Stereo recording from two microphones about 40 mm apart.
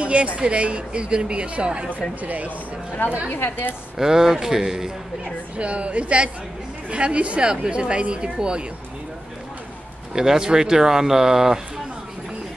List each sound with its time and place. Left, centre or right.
0.0 s a woman's voice: right
2.2 s a woman's voice: right
3.3 s a woman's voice: left
4.0 s speech: centre
5.2 s a woman's voice: right
10.1 s speech: centre